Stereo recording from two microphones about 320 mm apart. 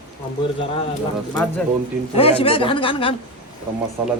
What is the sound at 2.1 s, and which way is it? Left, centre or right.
Speech, centre.